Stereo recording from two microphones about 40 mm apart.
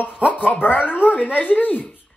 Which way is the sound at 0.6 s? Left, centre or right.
Left.